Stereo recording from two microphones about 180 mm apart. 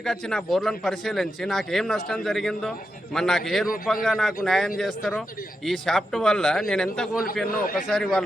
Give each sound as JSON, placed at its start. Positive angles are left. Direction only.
{"t": 0.0, "sound": "a man's voice", "side_deg": 5}
{"t": 7.4, "sound": "a man's voice", "side_deg": 55}
{"t": 7.8, "sound": "a man's voice", "side_deg": 0}